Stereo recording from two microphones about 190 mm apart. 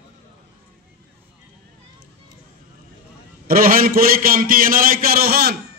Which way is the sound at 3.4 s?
50° right (ahead or behind).